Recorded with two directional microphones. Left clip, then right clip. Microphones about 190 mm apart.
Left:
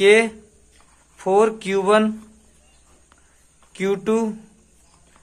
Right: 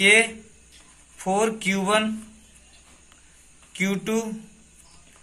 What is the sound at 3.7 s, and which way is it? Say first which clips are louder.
Speech: left 5 dB; 40° left (ahead or behind).